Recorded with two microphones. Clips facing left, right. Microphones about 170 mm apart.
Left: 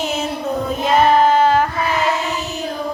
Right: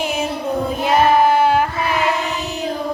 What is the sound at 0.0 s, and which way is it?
Child singing, 10° right (ahead or behind).